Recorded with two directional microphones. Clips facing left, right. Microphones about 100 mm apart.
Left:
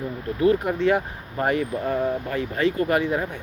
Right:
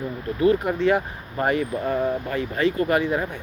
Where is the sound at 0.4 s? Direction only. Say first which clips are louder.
Even; 30° right (ahead or behind).